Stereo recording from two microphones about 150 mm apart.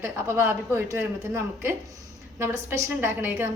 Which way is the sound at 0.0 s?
15° right (ahead or behind).